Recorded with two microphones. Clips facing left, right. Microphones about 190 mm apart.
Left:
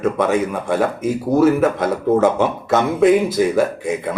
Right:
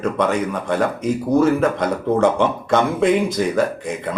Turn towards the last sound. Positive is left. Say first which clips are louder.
# left 2 dB
turn(degrees=5)  # may be behind; listen again after turning